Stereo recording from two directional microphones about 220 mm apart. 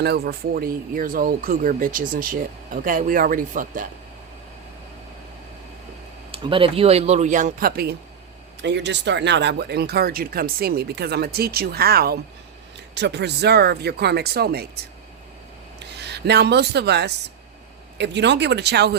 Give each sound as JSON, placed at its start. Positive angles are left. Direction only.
{"t": 0.0, "sound": "speech", "side_deg": -45}
{"t": 6.3, "sound": "speech", "side_deg": -25}
{"t": 15.8, "sound": "speech", "side_deg": -50}